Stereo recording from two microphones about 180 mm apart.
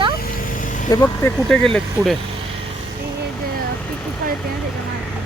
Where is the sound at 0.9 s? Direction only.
15° left (ahead or behind).